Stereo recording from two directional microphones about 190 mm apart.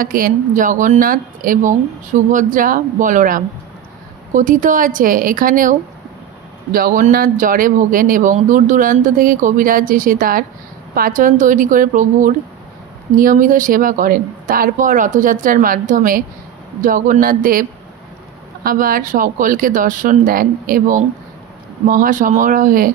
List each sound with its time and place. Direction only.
0.0 s a man's voice: 50° right (ahead or behind)